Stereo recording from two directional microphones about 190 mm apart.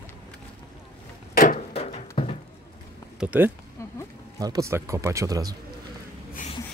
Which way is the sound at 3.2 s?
10° right (ahead or behind).